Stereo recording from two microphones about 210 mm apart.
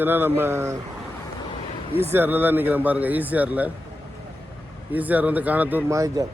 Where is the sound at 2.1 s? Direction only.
10° right (ahead or behind).